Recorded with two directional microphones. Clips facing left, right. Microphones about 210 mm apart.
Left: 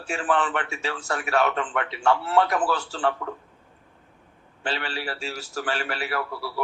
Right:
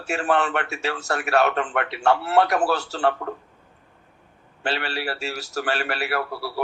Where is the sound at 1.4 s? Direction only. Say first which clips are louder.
Right 3 dB; 45° right (ahead or behind).